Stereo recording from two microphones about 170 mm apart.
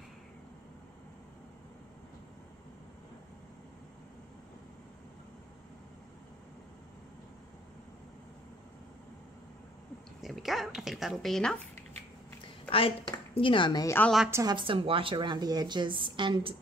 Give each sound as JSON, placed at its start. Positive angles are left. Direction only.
{"t": 10.2, "sound": "speech", "side_deg": 0}
{"t": 12.6, "sound": "a woman's voice", "side_deg": 35}
{"t": 14.3, "sound": "a woman's voice", "side_deg": -25}